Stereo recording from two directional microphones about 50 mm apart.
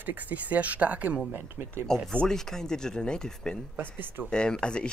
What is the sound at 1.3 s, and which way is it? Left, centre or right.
Speech, right.